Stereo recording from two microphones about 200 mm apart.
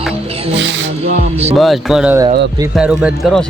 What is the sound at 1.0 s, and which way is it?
Speech, 30° right (ahead or behind).